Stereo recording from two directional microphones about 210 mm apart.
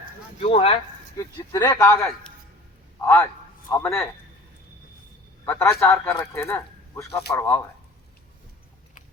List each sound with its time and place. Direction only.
0.3 s speech: 30° left (ahead or behind)
1.1 s a man's voice: 15° left (ahead or behind)
3.7 s a man's voice: 5° left (ahead or behind)
5.5 s a man's voice: 10° left (ahead or behind)